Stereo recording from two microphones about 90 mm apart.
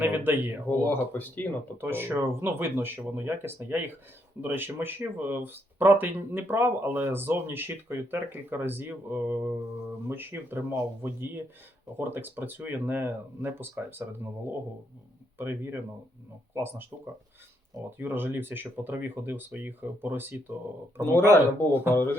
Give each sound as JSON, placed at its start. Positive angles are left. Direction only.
{"t": 0.0, "sound": "speech", "side_deg": -25}
{"t": 0.7, "sound": "speech", "side_deg": 20}
{"t": 1.8, "sound": "speech", "side_deg": -25}
{"t": 15.4, "sound": "speech", "side_deg": -25}
{"t": 17.9, "sound": "speech", "side_deg": -25}
{"t": 21.0, "sound": "speech", "side_deg": 30}